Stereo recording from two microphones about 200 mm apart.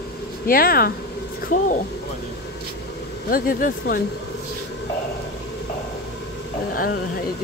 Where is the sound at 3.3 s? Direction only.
45° left (ahead or behind).